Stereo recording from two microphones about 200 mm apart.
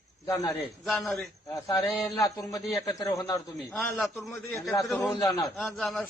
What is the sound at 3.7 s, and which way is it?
A man's voice, centre (ahead or behind).